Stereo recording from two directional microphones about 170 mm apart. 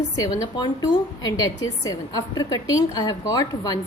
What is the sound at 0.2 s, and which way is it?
A woman's voice, 20° left (ahead or behind).